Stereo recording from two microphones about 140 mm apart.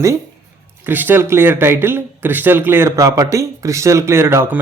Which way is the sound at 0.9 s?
15° right (ahead or behind).